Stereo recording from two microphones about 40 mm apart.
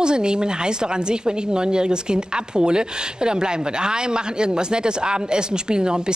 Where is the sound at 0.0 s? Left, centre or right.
Right.